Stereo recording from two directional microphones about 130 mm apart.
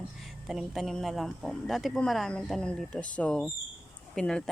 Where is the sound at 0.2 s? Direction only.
Centre (ahead or behind).